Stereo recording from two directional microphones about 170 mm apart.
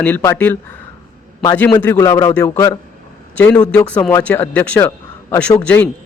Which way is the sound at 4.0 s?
15° left (ahead or behind).